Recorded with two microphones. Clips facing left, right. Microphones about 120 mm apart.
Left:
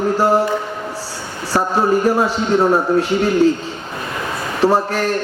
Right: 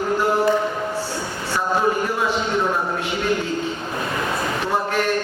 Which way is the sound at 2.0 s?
40° left (ahead or behind).